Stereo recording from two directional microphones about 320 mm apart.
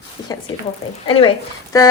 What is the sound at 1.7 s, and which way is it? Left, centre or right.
Speech, centre.